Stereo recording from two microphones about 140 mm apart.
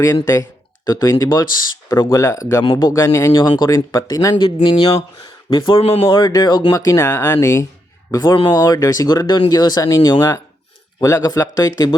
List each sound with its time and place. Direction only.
0.0 s speech: 25° left (ahead or behind)
4.4 s speech: 40° left (ahead or behind)